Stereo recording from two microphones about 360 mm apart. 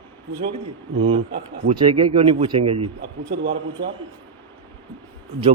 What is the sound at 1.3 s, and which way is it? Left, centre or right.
Speech, right.